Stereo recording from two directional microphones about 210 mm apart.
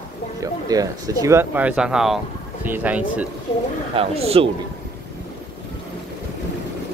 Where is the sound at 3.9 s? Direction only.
25° right (ahead or behind).